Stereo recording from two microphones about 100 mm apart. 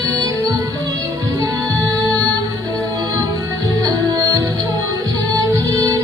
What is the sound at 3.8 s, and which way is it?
Music, 35° right (ahead or behind).